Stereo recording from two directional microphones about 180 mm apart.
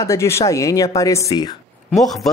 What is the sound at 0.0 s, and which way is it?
Speech, 15° left (ahead or behind).